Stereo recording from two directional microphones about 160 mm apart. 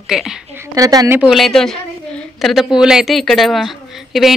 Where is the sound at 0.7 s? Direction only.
20° right (ahead or behind).